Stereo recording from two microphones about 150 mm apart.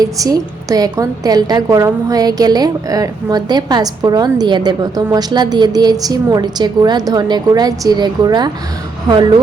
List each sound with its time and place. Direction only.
0.0 s a woman's voice: 25° right (ahead or behind)